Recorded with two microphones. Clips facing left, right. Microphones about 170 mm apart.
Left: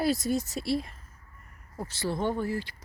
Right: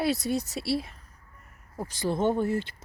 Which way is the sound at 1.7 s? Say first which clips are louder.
Right 3 dB; 15° right (ahead or behind).